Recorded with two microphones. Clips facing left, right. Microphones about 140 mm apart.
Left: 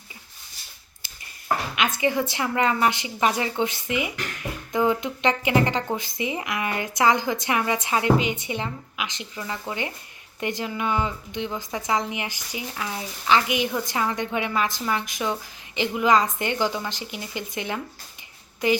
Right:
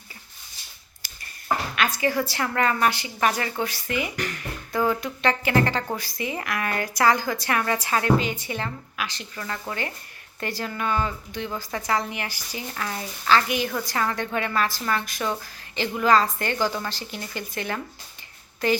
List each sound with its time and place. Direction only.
2.0 s a woman's voice: 20° left (ahead or behind)
12.6 s a woman's voice: 5° left (ahead or behind)